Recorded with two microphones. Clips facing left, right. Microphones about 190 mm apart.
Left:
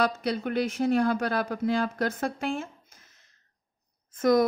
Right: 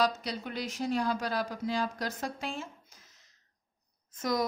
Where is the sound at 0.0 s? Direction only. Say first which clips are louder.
Left 4 dB; 60° left (ahead or behind).